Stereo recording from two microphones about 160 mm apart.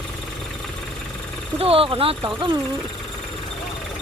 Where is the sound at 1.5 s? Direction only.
35° right (ahead or behind).